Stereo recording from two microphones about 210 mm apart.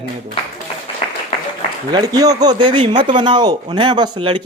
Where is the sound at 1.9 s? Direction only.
20° right (ahead or behind).